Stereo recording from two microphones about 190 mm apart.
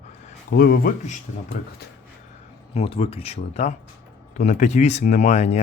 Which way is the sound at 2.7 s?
30° left (ahead or behind).